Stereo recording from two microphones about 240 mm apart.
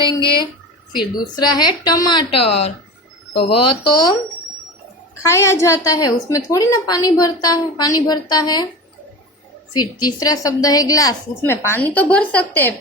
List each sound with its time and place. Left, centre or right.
0.0 s a woman's voice: left
5.2 s a woman's voice: centre
9.7 s a woman's voice: centre